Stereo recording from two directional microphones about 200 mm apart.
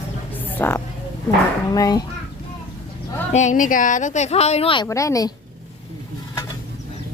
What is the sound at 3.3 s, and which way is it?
Speech, 35° left (ahead or behind).